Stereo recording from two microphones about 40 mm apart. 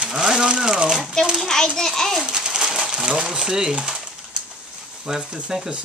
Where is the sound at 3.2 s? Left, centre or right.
Centre.